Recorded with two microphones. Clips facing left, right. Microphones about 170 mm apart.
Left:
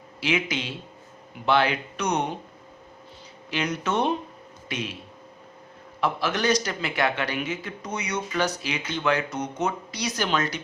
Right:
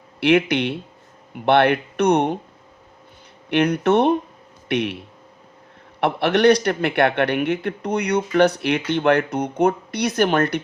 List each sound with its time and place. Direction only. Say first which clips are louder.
0.2 s a man's voice: right 10 dB; 65° right (ahead or behind)
3.5 s a man's voice: right 10 dB; 60° right (ahead or behind)
6.0 s a man's voice: right 8 dB; 65° right (ahead or behind)